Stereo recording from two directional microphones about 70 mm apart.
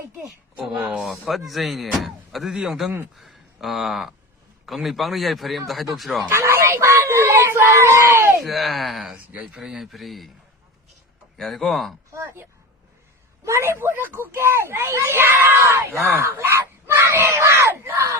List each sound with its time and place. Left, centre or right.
0.6 s speech: centre
6.3 s a sound: right
8.4 s speech: centre
9.1 s speech: centre
11.3 s speech: centre
12.1 s speech: right
16.9 s a sound: right
17.3 s crowd: right